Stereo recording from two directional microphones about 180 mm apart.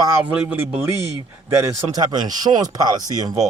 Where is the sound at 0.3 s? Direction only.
10° right (ahead or behind).